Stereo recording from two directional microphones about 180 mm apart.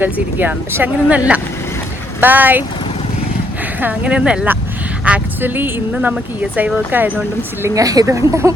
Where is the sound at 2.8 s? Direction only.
30° left (ahead or behind).